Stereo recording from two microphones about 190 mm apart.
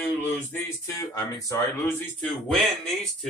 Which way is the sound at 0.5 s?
15° left (ahead or behind).